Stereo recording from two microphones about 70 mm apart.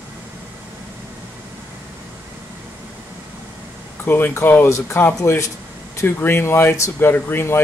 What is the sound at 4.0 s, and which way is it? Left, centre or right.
Speech, left.